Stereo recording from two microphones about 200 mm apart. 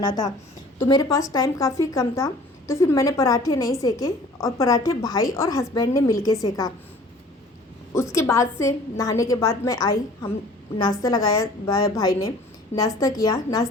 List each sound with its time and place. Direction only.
0.0 s a woman's voice: 20° left (ahead or behind)
7.9 s a woman's voice: 15° left (ahead or behind)